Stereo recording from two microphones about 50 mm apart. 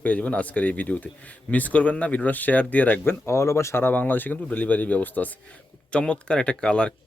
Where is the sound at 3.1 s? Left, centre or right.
Left.